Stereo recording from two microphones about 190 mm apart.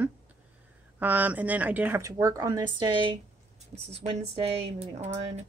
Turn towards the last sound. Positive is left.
turn(degrees=-35)  # may be behind; listen again after turning